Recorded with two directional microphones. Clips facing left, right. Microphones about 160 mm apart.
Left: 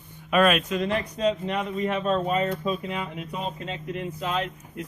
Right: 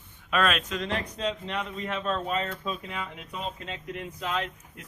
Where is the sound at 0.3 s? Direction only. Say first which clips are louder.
Left 6 dB; 10° left (ahead or behind).